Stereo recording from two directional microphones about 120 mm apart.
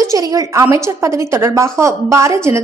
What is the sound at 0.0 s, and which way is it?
A woman's voice, 25° right (ahead or behind).